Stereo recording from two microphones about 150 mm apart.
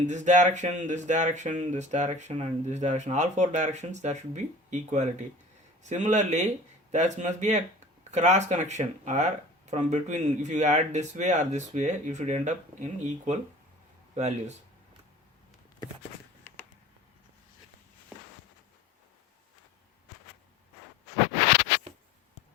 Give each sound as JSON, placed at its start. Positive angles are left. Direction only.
{"t": 0.1, "sound": "speech", "side_deg": -50}